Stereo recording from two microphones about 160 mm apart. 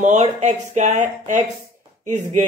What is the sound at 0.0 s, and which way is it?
Speech, 50° right (ahead or behind).